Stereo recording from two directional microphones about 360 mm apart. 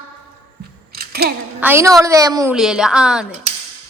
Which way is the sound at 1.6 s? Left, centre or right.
Centre.